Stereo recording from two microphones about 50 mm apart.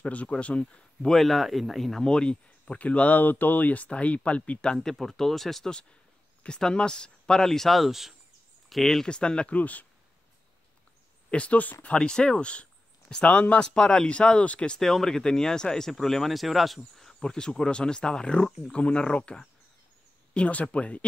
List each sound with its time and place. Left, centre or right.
0.0 s speech: left
1.1 s speech: centre
2.0 s speech: centre
4.7 s speech: centre
6.4 s speech: centre
9.0 s speech: centre
9.6 s speech: left
11.2 s speech: left
14.8 s speech: centre; by 21.0 s left